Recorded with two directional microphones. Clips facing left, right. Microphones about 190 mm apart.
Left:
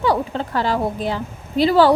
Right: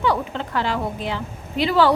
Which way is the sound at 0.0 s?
40° left (ahead or behind).